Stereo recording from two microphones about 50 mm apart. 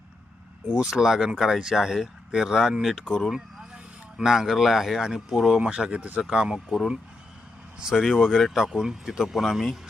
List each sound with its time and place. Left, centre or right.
0.8 s speech: centre
5.5 s speech: centre
6.7 s speech: centre
7.9 s speech: centre